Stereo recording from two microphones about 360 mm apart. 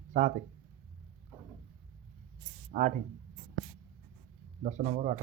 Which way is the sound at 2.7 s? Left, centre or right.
Right.